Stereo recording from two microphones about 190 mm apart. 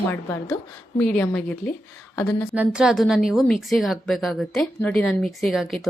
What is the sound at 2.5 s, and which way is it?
A woman's voice, 5° right (ahead or behind).